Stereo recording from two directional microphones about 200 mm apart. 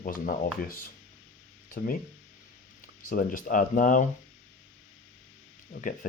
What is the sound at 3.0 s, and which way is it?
Speech, 40° left (ahead or behind).